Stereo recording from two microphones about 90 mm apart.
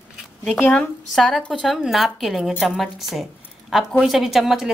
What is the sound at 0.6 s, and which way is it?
Speech, 20° left (ahead or behind).